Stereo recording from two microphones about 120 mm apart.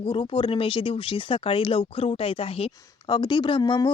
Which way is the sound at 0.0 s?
45° left (ahead or behind).